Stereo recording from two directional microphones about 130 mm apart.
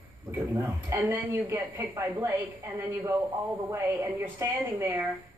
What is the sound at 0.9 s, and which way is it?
A woman's voice, 15° right (ahead or behind).